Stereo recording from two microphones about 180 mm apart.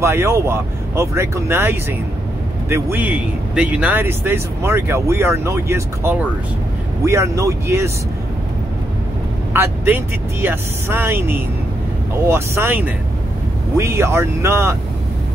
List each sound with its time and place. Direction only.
0.0 s speech: 15° right (ahead or behind)
9.5 s speech: 10° right (ahead or behind)